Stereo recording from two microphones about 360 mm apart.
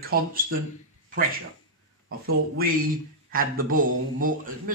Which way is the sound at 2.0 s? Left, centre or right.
Right.